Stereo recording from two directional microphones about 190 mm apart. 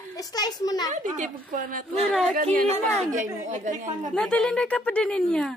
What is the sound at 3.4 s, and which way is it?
Speech, 40° right (ahead or behind).